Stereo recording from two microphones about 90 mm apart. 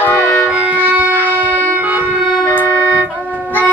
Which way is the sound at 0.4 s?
15° right (ahead or behind).